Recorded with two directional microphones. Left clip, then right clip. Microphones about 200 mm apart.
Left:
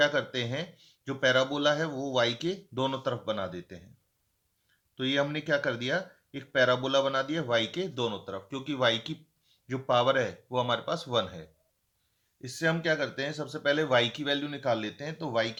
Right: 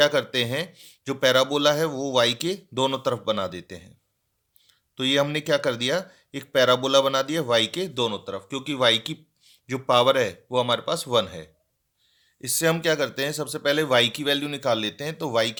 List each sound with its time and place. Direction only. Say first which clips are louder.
0.0 s speech: right 6 dB; 35° right (ahead or behind)
4.9 s speech: right 6 dB; 40° right (ahead or behind)